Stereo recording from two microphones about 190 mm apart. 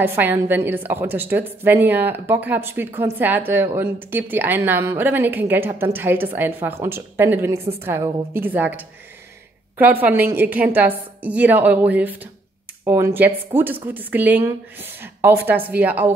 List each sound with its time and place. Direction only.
0.0 s a woman's voice: 10° right (ahead or behind)